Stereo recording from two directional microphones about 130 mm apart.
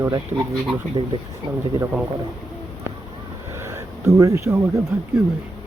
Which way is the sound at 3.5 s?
20° right (ahead or behind).